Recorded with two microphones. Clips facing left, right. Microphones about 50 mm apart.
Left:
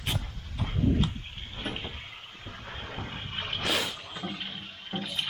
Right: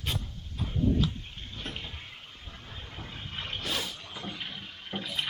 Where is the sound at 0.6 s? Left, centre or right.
Left.